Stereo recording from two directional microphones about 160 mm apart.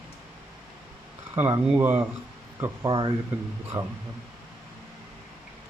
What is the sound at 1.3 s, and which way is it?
Speech, 20° right (ahead or behind).